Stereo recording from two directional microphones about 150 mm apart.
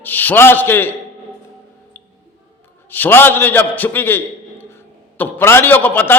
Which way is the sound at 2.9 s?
15° left (ahead or behind).